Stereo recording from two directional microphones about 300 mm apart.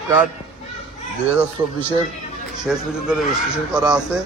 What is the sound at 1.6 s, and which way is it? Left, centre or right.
Speech, centre.